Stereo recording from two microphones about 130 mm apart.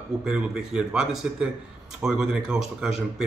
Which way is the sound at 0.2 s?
5° right (ahead or behind).